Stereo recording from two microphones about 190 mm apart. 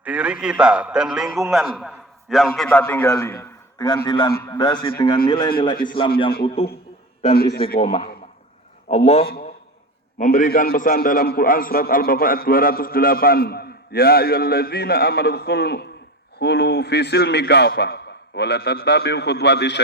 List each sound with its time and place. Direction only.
0.0 s a man's voice: 5° right (ahead or behind); by 6.1 s 25° left (ahead or behind)
7.3 s a man's voice: 55° left (ahead or behind)
7.8 s a man's voice: 30° left (ahead or behind)
9.2 s a man's voice: 50° left (ahead or behind)
10.2 s a man's voice: 40° left (ahead or behind); by 19.8 s 65° left (ahead or behind)